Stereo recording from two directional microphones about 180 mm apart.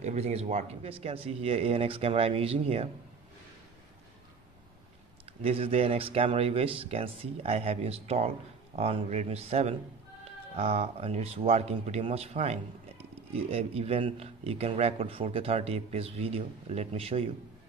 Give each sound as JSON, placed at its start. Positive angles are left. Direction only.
{"t": 0.0, "sound": "speech", "side_deg": -35}
{"t": 5.2, "sound": "speech", "side_deg": -30}